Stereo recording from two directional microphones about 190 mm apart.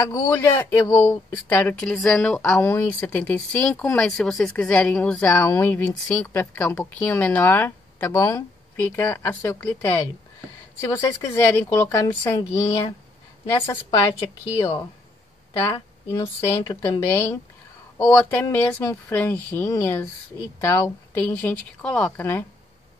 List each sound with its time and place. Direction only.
0.0 s a woman's voice: 15° left (ahead or behind)
15.6 s speech: 20° left (ahead or behind)